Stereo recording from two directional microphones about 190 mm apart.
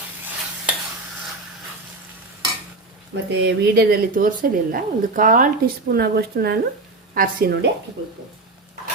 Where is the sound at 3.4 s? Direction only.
50° right (ahead or behind).